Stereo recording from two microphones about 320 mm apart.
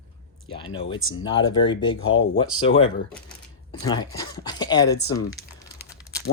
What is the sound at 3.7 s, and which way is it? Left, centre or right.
Speech, centre.